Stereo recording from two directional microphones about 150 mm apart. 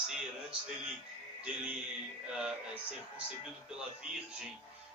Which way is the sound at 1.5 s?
5° right (ahead or behind).